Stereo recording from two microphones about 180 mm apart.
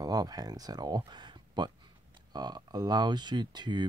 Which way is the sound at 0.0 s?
20° right (ahead or behind).